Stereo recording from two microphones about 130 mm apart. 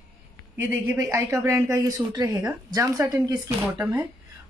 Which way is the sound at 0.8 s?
25° right (ahead or behind).